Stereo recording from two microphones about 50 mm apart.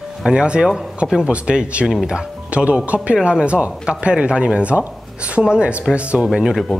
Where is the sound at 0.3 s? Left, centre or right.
Centre.